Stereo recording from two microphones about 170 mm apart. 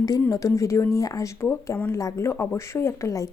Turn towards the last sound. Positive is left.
turn(degrees=20)  # may be behind; listen again after turning